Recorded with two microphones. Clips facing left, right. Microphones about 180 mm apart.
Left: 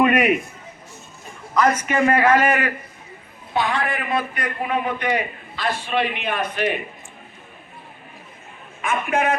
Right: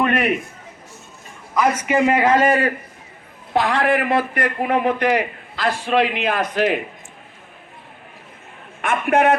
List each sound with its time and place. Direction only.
0.0 s a sound: 10° left (ahead or behind)
1.5 s a man's voice: 15° right (ahead or behind); by 2.7 s 30° right (ahead or behind)
3.5 s a man's voice: 80° right
5.8 s speech: 90° right
8.8 s a man's voice: 65° right (ahead or behind)